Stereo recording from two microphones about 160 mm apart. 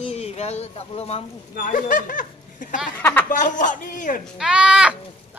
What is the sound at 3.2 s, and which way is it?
Speech, 55° left (ahead or behind).